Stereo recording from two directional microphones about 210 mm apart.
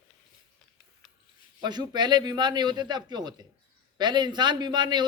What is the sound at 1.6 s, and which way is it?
Speech, 20° right (ahead or behind).